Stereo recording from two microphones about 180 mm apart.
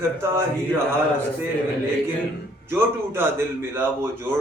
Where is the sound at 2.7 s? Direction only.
15° right (ahead or behind).